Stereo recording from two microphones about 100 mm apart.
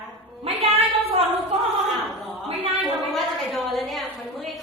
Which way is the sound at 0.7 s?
75° right (ahead or behind).